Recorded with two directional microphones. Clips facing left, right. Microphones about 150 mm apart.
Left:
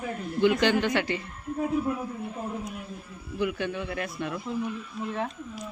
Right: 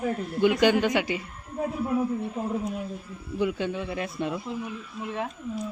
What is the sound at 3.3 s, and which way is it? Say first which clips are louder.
Speech: right 2 dB; 20° right (ahead or behind).